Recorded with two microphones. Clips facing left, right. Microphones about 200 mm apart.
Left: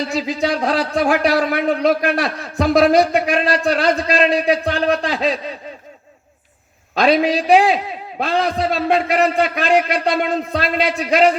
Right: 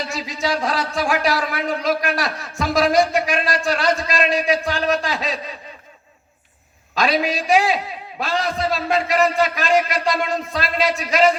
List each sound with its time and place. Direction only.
0.1 s speech: 60° left (ahead or behind)
6.9 s speech: 60° left (ahead or behind)